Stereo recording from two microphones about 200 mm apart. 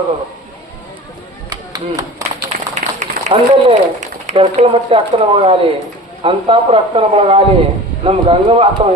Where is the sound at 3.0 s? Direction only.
30° right (ahead or behind).